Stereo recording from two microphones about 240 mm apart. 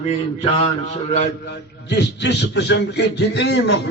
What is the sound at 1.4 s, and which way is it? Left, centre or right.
A man's voice, left.